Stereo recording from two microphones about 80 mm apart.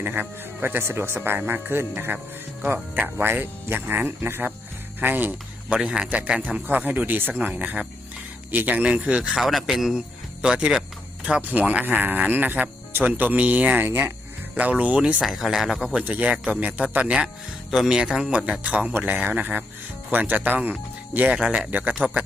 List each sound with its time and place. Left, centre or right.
0.0 s speech: right
5.7 s speech: centre; by 14.1 s right
14.5 s speech: centre
15.2 s speech: centre
15.9 s speech: centre